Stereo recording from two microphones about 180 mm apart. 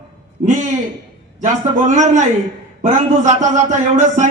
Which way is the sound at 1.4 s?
45° right (ahead or behind).